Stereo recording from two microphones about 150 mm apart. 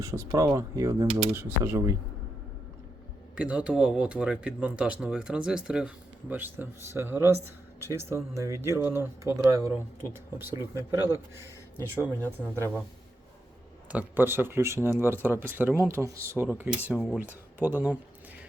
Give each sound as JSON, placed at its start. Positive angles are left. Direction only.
{"t": 0.0, "sound": "speech", "side_deg": -20}
{"t": 3.3, "sound": "speech", "side_deg": -10}
{"t": 11.9, "sound": "speech", "side_deg": -15}
{"t": 13.9, "sound": "speech", "side_deg": -15}